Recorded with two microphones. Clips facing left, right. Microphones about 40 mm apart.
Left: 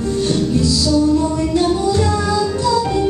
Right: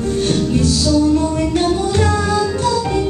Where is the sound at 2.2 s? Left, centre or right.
Right.